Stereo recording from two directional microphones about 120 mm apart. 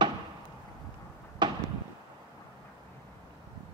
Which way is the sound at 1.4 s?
40° right (ahead or behind).